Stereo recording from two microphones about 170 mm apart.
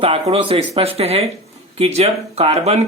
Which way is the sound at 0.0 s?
35° right (ahead or behind).